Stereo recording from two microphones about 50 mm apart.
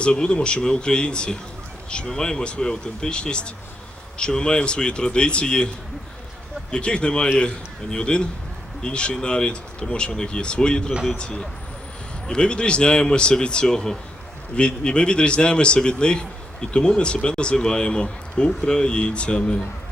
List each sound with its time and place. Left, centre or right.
0.0 s a man's voice: centre
6.7 s a man's voice: centre